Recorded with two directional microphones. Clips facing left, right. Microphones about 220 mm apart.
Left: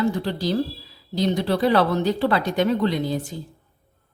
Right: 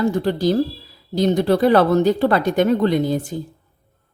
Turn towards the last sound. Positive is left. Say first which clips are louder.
# right 6 dB
turn(degrees=-50)  # may be behind; listen again after turning